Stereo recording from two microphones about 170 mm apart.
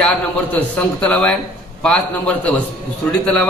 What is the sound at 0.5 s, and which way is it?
A man's voice, 10° left (ahead or behind).